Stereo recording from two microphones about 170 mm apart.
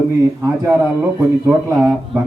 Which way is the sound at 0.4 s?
15° right (ahead or behind).